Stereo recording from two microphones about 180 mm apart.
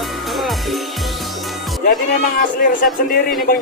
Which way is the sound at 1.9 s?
50° left (ahead or behind).